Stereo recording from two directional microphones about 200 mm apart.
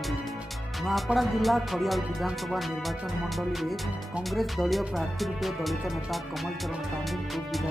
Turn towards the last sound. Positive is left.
turn(degrees=0)  # may be behind; listen again after turning